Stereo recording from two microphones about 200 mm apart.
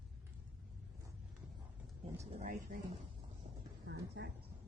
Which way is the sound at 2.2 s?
40° right (ahead or behind).